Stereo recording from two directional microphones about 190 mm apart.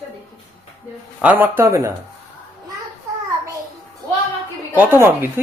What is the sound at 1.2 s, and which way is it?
Speech, 10° right (ahead or behind).